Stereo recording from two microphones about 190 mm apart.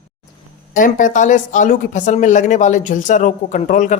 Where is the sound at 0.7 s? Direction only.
45° left (ahead or behind).